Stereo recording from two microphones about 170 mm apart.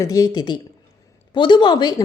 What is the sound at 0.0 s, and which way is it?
Speech, 20° left (ahead or behind).